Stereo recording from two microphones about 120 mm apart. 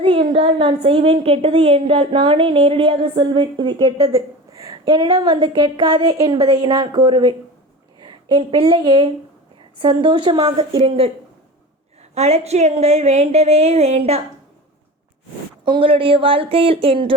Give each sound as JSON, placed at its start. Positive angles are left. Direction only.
{"t": 0.0, "sound": "a woman's voice", "side_deg": -50}
{"t": 4.9, "sound": "a woman's voice", "side_deg": -40}
{"t": 6.7, "sound": "a woman's voice", "side_deg": -45}
{"t": 12.1, "sound": "speech", "side_deg": -60}
{"t": 15.6, "sound": "a woman's voice", "side_deg": -45}